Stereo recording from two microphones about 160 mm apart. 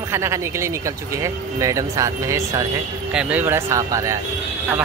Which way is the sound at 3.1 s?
10° right (ahead or behind).